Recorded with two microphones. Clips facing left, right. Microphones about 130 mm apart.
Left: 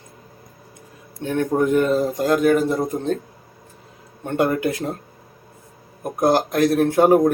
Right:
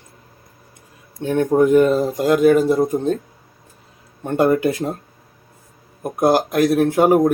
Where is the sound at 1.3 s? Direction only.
15° right (ahead or behind).